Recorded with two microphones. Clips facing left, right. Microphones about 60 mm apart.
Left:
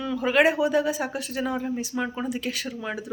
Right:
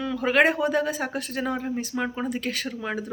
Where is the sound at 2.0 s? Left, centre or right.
Right.